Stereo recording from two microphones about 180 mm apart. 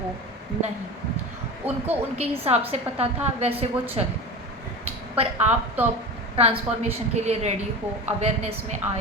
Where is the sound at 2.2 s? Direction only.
35° right (ahead or behind).